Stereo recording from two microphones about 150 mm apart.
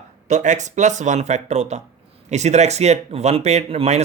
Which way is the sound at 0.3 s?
50° right (ahead or behind).